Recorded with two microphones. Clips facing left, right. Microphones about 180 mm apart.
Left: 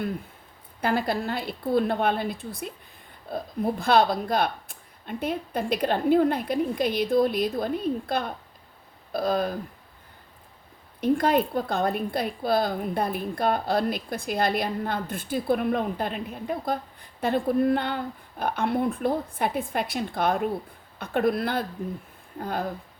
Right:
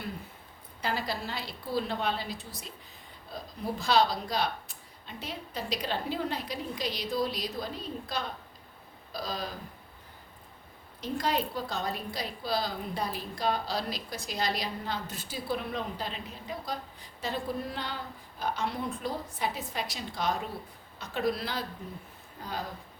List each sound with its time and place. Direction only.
0.8 s a woman's voice: 55° left (ahead or behind)
11.0 s a woman's voice: 55° left (ahead or behind)